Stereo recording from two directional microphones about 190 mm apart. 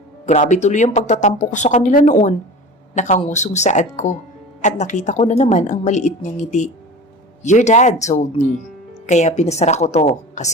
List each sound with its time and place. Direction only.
0.3 s speech: 40° left (ahead or behind)